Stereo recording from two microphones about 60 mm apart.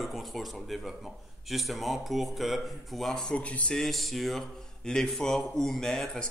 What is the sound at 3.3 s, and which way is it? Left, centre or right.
Speech, left.